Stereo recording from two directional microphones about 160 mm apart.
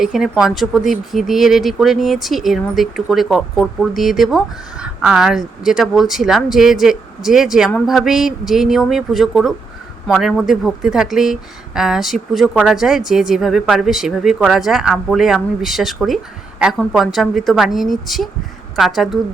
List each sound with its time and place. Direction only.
0.0 s speech: 5° right (ahead or behind)